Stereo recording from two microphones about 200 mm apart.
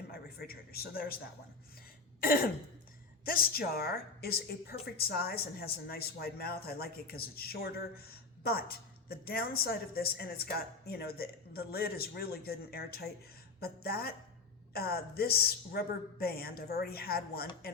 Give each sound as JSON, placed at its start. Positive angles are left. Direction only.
{"t": 0.1, "sound": "a woman's voice", "side_deg": 50}
{"t": 2.2, "sound": "a woman's voice", "side_deg": 45}